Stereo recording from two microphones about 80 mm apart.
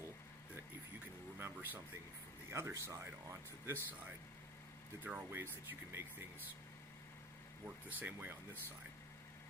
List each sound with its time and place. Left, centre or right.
1.4 s a sound: right
2.5 s speech: right
5.0 s speech: right
7.9 s speech: right